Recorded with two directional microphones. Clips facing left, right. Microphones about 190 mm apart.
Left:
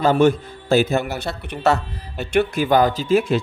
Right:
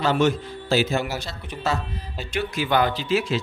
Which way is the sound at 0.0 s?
50° left (ahead or behind).